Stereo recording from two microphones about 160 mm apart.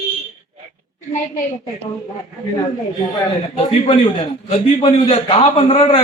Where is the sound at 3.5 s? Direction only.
35° left (ahead or behind).